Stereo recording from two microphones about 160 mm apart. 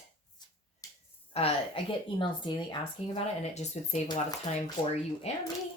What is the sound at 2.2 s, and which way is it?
A woman's voice, 30° left (ahead or behind).